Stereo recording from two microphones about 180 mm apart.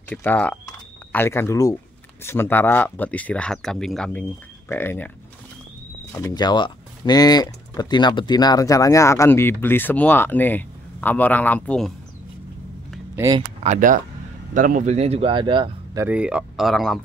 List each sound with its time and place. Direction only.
0.1 s speech: 10° left (ahead or behind)
0.7 s a sound: 15° left (ahead or behind)
2.2 s speech: 15° left (ahead or behind)
6.1 s speech: 20° left (ahead or behind)
13.1 s speech: 15° right (ahead or behind)
13.7 s speech: 45° right (ahead or behind); by 16.0 s 25° right (ahead or behind)
16.0 s speech: 5° right (ahead or behind)